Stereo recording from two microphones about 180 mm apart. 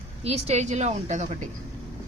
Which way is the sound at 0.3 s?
35° right (ahead or behind).